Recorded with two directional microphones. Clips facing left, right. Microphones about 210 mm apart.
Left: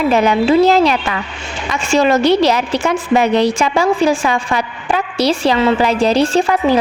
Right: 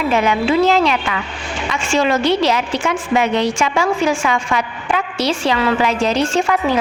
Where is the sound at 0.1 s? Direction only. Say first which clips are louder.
Left 3 dB; 35° left (ahead or behind).